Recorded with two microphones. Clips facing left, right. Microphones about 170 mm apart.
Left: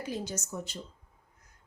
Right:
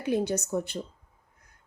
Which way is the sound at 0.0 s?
60° right (ahead or behind).